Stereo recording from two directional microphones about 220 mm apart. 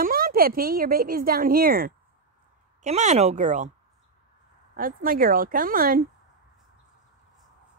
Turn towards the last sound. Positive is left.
turn(degrees=-40)  # may be behind; listen again after turning